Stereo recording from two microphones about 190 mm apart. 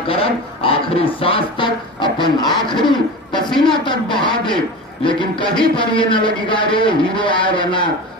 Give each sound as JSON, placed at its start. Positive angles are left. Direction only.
{"t": 0.1, "sound": "speech", "side_deg": 30}
{"t": 3.4, "sound": "speech", "side_deg": 0}
{"t": 3.7, "sound": "speech", "side_deg": 25}